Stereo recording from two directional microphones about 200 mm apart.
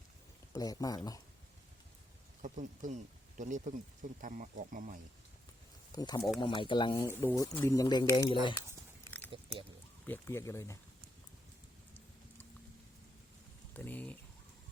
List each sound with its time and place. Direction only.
0.5 s speech: 20° left (ahead or behind)
2.4 s speech: 40° right (ahead or behind)
5.9 s speech: 20° left (ahead or behind)
9.0 s a sound: 10° left (ahead or behind)
10.1 s speech: 15° left (ahead or behind)
13.7 s speech: 10° left (ahead or behind)